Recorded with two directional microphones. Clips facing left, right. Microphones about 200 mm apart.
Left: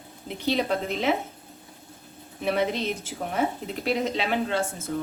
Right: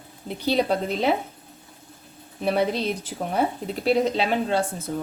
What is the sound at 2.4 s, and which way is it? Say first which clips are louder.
Speech: right 3 dB; 35° right (ahead or behind).